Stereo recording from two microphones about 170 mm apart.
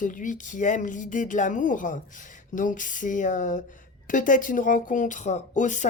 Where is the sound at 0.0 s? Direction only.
50° left (ahead or behind).